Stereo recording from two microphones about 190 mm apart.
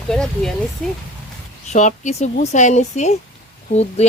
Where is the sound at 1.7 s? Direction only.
40° left (ahead or behind).